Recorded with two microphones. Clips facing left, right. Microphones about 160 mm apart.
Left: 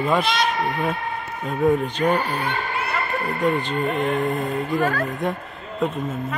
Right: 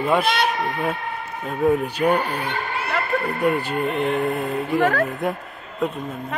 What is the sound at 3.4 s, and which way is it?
Speech, 10° right (ahead or behind).